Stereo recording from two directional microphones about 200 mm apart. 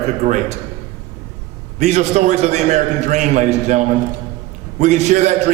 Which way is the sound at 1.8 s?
35° right (ahead or behind).